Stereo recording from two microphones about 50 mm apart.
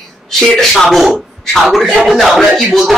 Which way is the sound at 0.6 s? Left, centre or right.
Centre.